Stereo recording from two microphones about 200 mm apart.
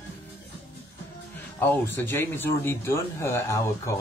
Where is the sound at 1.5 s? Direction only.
10° left (ahead or behind).